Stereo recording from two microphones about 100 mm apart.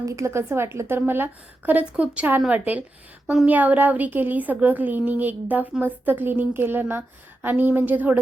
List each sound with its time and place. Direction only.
0.0 s a woman's voice: 30° right (ahead or behind)